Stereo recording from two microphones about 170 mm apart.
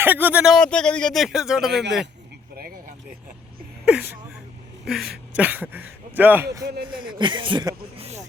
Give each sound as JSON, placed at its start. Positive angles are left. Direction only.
{"t": 0.0, "sound": "speech", "side_deg": -10}
{"t": 3.8, "sound": "a sound", "side_deg": -5}
{"t": 4.9, "sound": "speech", "side_deg": 0}
{"t": 6.7, "sound": "speech", "side_deg": -65}
{"t": 7.0, "sound": "speech", "side_deg": -30}
{"t": 7.9, "sound": "a sound", "side_deg": -40}